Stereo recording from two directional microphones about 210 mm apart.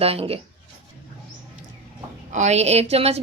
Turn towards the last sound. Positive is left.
turn(degrees=-30)  # may be behind; listen again after turning